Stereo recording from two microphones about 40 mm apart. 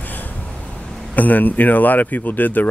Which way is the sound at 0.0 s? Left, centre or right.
Left.